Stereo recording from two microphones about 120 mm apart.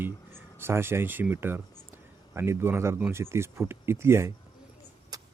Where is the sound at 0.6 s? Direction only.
20° right (ahead or behind).